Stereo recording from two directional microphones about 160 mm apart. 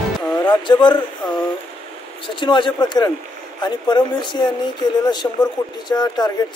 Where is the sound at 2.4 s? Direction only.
30° left (ahead or behind).